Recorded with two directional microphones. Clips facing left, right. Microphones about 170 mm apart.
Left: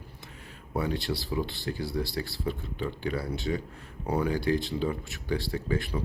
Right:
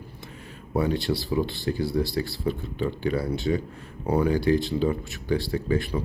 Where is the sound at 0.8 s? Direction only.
25° right (ahead or behind).